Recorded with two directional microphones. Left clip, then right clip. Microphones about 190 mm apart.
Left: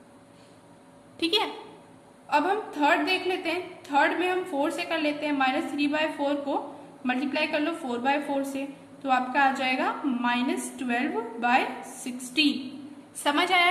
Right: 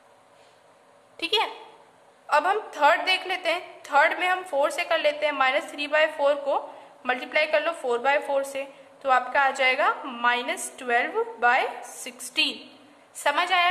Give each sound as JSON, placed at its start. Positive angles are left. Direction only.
{"t": 1.1, "sound": "speech", "side_deg": -15}
{"t": 2.2, "sound": "a woman's voice", "side_deg": -40}
{"t": 13.2, "sound": "a woman's voice", "side_deg": -20}